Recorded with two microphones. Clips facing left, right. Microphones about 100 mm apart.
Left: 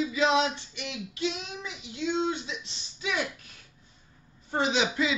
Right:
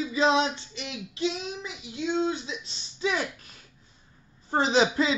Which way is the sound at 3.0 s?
35° right (ahead or behind).